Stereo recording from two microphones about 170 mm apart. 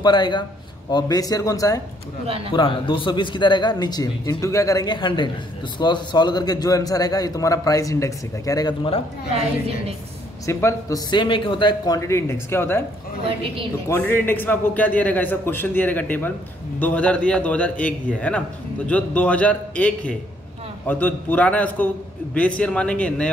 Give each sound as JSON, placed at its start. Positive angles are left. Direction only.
{"t": 0.0, "sound": "a man's voice", "side_deg": 25}
{"t": 2.2, "sound": "a man's voice", "side_deg": -35}
{"t": 2.5, "sound": "a man's voice", "side_deg": 30}
{"t": 10.4, "sound": "a man's voice", "side_deg": 15}
{"t": 13.8, "sound": "a man's voice", "side_deg": 15}